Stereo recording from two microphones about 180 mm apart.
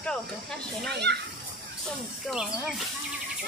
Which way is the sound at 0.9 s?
70° right (ahead or behind).